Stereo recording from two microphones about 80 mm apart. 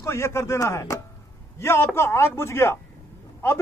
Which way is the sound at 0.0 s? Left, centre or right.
Left.